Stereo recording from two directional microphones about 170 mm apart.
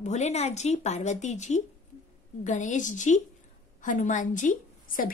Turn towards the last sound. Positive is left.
turn(degrees=50)  # may be behind; listen again after turning